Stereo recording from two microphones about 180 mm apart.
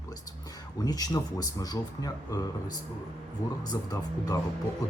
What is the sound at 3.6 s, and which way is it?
Speech, 20° left (ahead or behind).